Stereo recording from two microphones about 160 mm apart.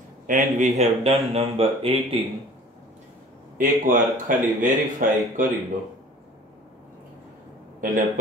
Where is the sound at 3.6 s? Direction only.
55° right (ahead or behind).